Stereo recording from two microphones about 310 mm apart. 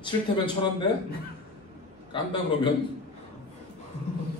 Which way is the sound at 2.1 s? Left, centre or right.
Centre.